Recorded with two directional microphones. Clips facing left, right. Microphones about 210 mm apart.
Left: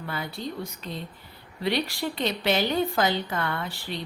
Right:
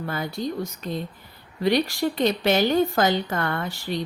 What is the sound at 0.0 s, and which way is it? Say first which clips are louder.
A woman's voice: right 5 dB; 45° right (ahead or behind).